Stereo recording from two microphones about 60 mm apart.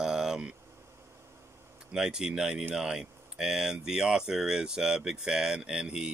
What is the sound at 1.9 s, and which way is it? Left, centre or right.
Speech, centre.